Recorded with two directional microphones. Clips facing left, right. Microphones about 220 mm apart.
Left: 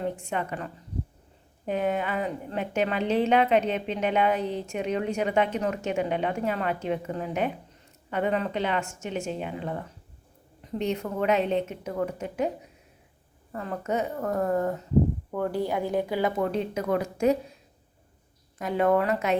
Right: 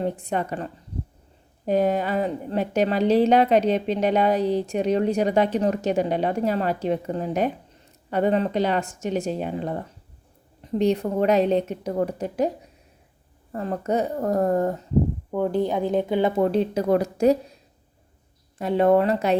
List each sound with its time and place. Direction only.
0.0 s a woman's voice: 35° right (ahead or behind)
13.5 s a woman's voice: 35° right (ahead or behind)
15.3 s speech: 20° right (ahead or behind); by 17.3 s 35° right (ahead or behind)
18.5 s speech: 30° right (ahead or behind)